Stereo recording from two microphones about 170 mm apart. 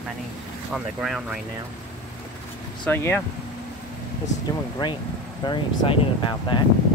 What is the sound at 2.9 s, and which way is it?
Speech, 10° left (ahead or behind).